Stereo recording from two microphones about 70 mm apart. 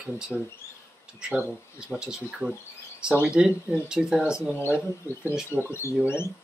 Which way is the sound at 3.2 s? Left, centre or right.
Centre.